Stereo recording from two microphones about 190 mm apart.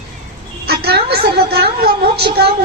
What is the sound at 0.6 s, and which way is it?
A woman's voice, 55° right (ahead or behind).